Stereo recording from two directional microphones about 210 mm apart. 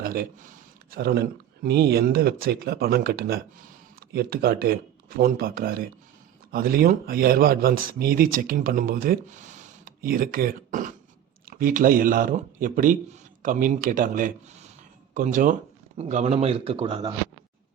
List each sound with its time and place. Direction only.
0.0 s a man's voice: 45° right (ahead or behind); by 17.2 s 20° right (ahead or behind)